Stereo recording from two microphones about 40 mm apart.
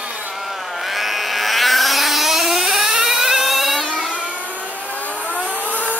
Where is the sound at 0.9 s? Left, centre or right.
Centre.